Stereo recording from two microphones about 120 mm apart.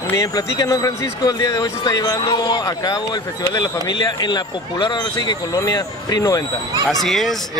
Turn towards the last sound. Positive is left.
turn(degrees=0)  # may be behind; listen again after turning